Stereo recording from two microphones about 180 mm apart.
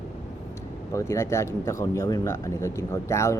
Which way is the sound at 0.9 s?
15° left (ahead or behind).